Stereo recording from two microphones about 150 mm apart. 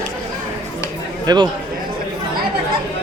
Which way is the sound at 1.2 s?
30° right (ahead or behind).